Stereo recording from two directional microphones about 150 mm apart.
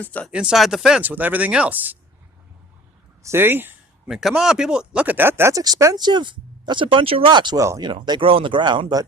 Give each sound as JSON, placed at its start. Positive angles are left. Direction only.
{"t": 0.0, "sound": "speech", "side_deg": 10}
{"t": 0.3, "sound": "speech", "side_deg": -5}
{"t": 3.2, "sound": "speech", "side_deg": -15}
{"t": 4.1, "sound": "speech", "side_deg": -5}